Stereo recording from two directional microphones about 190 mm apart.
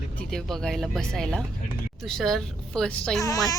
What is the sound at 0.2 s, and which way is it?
Speech, centre (ahead or behind).